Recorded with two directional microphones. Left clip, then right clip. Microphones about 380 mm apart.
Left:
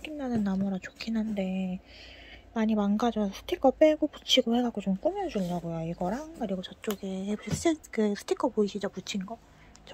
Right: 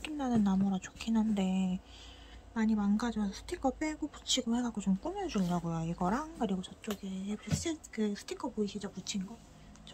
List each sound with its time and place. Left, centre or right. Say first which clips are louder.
0.0 s speech: left 1 dB; centre
4.8 s speech: left 7 dB; centre
5.3 s speech: left 3 dB; centre